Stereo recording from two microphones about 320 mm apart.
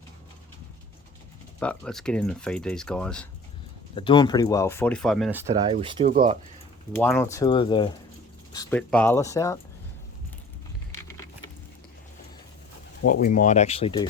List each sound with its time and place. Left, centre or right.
1.5 s speech: centre
3.9 s speech: centre
6.1 s speech: right
6.9 s speech: centre
8.5 s speech: centre
13.0 s speech: left